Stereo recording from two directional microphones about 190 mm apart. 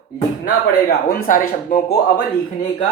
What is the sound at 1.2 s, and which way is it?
Speech, 45° left (ahead or behind).